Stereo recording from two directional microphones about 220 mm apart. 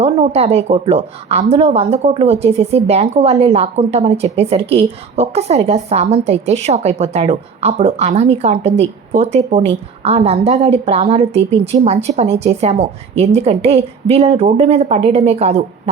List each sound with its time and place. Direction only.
0.0 s a woman's voice: 25° right (ahead or behind)